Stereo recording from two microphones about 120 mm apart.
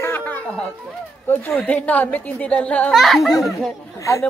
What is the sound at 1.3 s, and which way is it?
Speech, 20° left (ahead or behind).